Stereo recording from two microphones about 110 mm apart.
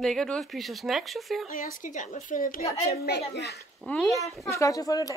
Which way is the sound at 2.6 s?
70° left (ahead or behind).